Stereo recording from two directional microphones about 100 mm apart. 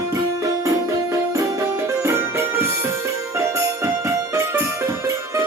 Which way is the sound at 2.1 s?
25° right (ahead or behind).